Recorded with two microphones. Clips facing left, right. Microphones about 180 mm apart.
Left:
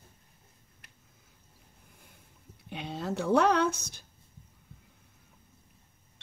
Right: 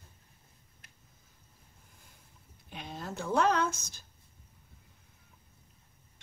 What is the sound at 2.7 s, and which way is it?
Speech, 65° left (ahead or behind).